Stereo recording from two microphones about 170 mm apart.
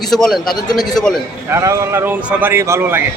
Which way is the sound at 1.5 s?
20° right (ahead or behind).